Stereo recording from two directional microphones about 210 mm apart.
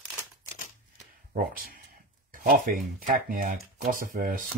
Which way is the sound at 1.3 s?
40° right (ahead or behind).